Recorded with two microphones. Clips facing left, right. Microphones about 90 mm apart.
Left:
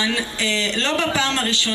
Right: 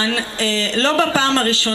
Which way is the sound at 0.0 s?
40° right (ahead or behind).